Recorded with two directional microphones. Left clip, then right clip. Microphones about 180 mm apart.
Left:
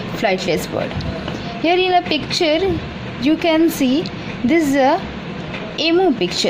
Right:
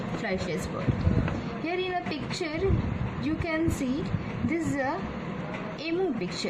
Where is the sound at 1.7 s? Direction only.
50° left (ahead or behind).